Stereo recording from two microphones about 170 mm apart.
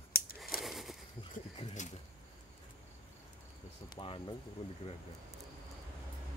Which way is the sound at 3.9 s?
30° left (ahead or behind).